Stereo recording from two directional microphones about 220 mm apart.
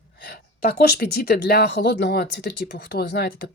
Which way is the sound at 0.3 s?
45° left (ahead or behind).